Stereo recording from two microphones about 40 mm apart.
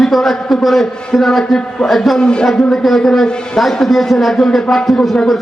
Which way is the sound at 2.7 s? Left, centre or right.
Centre.